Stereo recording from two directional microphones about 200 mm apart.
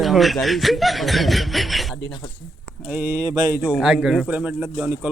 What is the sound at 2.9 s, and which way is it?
Speech, 10° right (ahead or behind).